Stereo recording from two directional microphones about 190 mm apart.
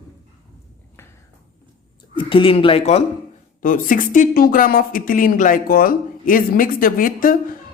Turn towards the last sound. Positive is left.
turn(degrees=45)  # may be behind; listen again after turning